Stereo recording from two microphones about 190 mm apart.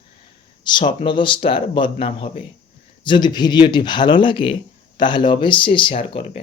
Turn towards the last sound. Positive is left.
turn(degrees=30)  # may be behind; listen again after turning